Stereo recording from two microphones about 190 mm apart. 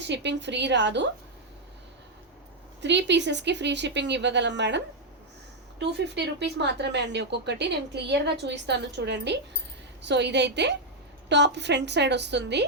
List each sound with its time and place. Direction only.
0.0 s a woman's voice: 65° right (ahead or behind)
2.8 s a woman's voice: 65° right (ahead or behind)
5.8 s speech: 65° right (ahead or behind)